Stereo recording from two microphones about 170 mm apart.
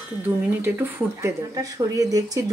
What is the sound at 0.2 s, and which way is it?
Speech, 10° right (ahead or behind).